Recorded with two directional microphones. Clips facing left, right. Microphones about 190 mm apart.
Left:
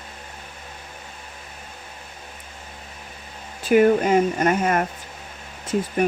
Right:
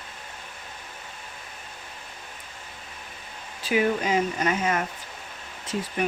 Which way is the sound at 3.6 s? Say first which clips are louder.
Left 8 dB; 50° left (ahead or behind).